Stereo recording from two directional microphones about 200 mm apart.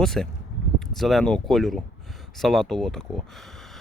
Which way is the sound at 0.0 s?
Centre (ahead or behind).